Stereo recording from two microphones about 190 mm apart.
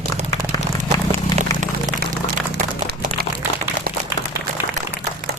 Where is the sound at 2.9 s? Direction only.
55° right (ahead or behind).